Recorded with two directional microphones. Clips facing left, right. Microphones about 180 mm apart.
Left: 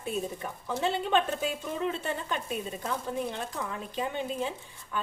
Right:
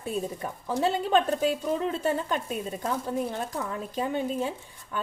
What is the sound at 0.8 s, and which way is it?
A woman's voice, 40° right (ahead or behind).